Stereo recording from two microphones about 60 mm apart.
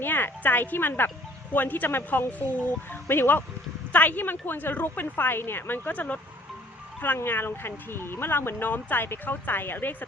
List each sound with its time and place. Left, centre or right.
0.0 s speech: left
7.2 s speech: left